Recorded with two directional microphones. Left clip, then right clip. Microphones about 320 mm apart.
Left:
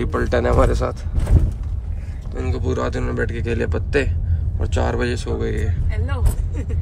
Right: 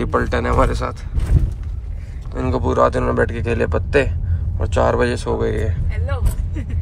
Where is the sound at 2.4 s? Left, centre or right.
Centre.